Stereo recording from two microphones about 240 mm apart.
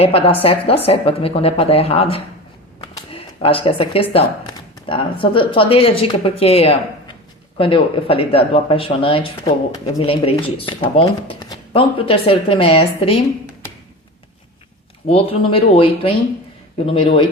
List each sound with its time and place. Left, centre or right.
0.0 s speech: left
15.0 s speech: left